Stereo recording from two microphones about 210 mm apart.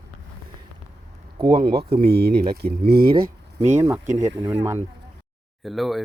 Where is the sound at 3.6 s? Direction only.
35° right (ahead or behind).